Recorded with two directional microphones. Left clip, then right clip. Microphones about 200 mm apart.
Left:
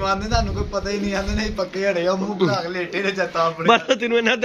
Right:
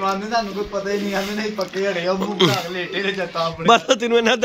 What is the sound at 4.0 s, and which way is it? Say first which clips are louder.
Speech: right 2 dB; 20° right (ahead or behind).